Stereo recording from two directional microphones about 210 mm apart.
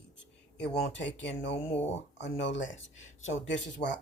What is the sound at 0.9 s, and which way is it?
Speech, 60° left (ahead or behind).